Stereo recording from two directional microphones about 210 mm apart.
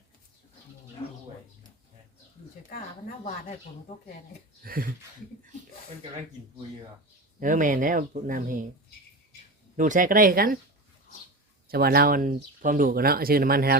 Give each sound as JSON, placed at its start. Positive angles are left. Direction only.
{"t": 1.0, "sound": "a sound", "side_deg": 25}
{"t": 4.6, "sound": "speech", "side_deg": -45}
{"t": 7.3, "sound": "speech", "side_deg": -40}
{"t": 9.7, "sound": "speech", "side_deg": -40}
{"t": 11.7, "sound": "speech", "side_deg": -45}